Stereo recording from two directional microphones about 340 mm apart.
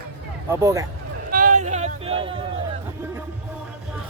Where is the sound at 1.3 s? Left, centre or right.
Right.